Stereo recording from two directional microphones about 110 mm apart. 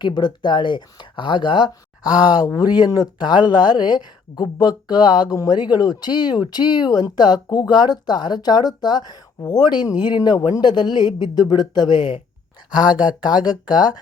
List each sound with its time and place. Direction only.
0.0 s speech: 40° left (ahead or behind)
12.7 s speech: 10° right (ahead or behind)